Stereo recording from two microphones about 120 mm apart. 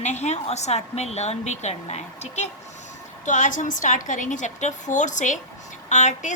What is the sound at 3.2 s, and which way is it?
A woman's voice, 90° left.